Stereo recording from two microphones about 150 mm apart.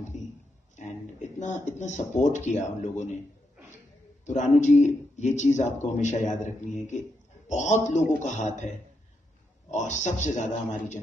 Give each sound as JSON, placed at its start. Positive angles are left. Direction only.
{"t": 0.1, "sound": "a sound", "side_deg": 55}
{"t": 0.7, "sound": "speech", "side_deg": 55}
{"t": 4.3, "sound": "speech", "side_deg": 55}
{"t": 9.7, "sound": "speech", "side_deg": 55}